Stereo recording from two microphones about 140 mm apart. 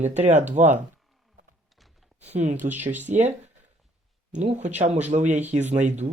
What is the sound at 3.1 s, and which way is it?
Speech, 55° right (ahead or behind).